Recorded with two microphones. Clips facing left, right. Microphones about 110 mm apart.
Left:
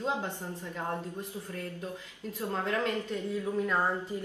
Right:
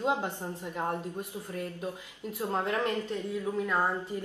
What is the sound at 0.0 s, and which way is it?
A woman's voice, 20° right (ahead or behind).